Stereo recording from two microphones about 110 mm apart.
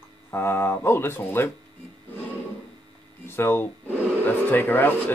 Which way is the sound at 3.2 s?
20° left (ahead or behind).